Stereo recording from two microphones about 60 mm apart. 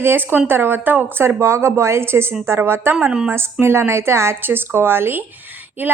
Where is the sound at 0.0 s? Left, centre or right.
Right.